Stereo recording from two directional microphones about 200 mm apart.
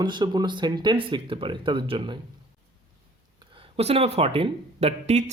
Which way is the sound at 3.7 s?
30° right (ahead or behind).